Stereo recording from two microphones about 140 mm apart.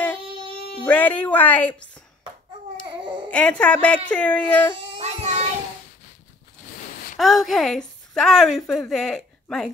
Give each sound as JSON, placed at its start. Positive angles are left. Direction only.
{"t": 0.8, "sound": "speech", "side_deg": 10}
{"t": 3.3, "sound": "speech", "side_deg": 10}
{"t": 4.9, "sound": "child singing", "side_deg": -50}
{"t": 7.2, "sound": "a woman's voice", "side_deg": 0}